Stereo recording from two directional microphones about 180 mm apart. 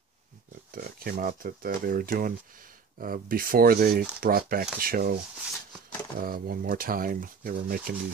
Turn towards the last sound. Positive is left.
turn(degrees=-55)  # may be behind; listen again after turning